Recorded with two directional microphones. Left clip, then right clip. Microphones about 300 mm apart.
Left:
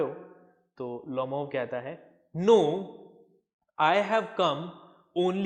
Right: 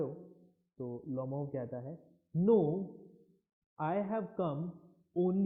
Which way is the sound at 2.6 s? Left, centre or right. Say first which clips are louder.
Left 7 dB; left.